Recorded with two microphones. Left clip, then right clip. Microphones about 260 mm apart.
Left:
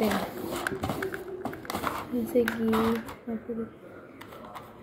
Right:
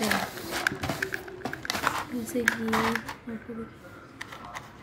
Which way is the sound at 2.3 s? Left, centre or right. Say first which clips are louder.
Left 1 dB; right.